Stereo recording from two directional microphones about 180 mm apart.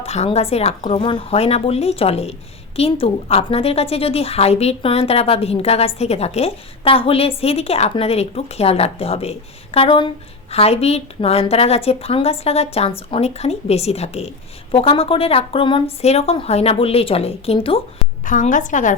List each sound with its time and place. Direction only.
0.0 s a woman's voice: 35° left (ahead or behind)
18.3 s a woman's voice: 45° left (ahead or behind)